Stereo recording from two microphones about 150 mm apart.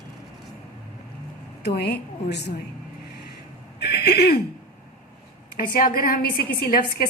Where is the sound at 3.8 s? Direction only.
90° left.